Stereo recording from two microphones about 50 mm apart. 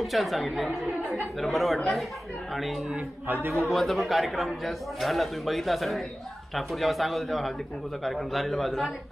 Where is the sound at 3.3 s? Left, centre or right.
Right.